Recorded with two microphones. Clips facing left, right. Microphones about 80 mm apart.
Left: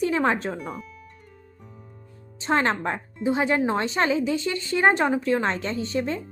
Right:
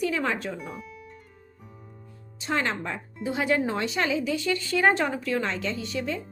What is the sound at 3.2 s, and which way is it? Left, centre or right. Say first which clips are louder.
Speech: left 3 dB; left.